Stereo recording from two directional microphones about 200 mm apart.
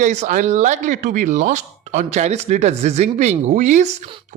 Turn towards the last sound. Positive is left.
turn(degrees=-35)  # may be behind; listen again after turning